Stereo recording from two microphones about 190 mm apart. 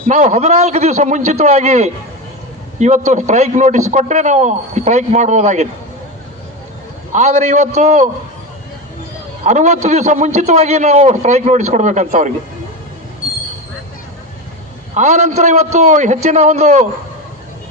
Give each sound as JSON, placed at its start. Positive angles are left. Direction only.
{"t": 0.1, "sound": "a man's voice", "side_deg": -40}
{"t": 7.1, "sound": "a man's voice", "side_deg": -40}
{"t": 9.4, "sound": "a man's voice", "side_deg": -35}
{"t": 14.9, "sound": "a man's voice", "side_deg": -40}